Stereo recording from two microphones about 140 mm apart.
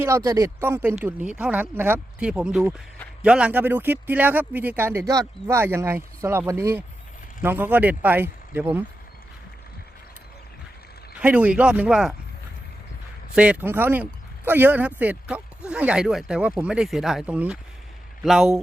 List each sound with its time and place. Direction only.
0.0 s speech: 20° right (ahead or behind)
11.2 s speech: 10° right (ahead or behind)
13.3 s speech: 10° right (ahead or behind)